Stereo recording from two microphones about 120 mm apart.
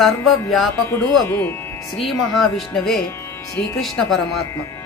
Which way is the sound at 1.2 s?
20° left (ahead or behind).